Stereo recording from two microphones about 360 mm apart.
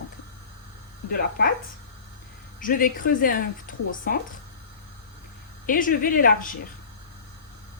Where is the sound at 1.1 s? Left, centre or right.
Left.